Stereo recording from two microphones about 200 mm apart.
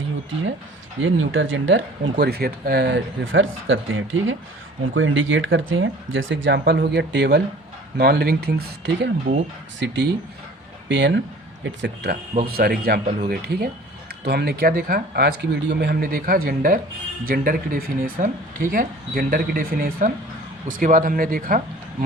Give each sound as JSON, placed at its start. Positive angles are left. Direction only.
{"t": 1.0, "sound": "speech", "side_deg": -80}
{"t": 12.5, "sound": "speech", "side_deg": -50}